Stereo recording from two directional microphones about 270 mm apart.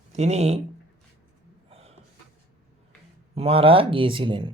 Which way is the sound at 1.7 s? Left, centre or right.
Right.